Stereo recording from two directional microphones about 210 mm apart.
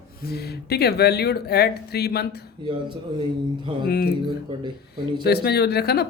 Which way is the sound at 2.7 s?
20° right (ahead or behind).